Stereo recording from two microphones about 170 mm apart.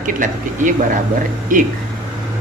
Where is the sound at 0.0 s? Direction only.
50° right (ahead or behind).